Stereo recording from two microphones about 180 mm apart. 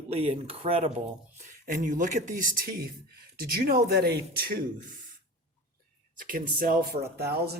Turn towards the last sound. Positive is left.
turn(degrees=-65)  # may be behind; listen again after turning